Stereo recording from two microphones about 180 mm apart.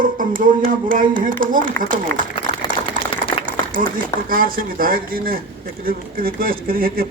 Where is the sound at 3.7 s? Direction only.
50° right (ahead or behind).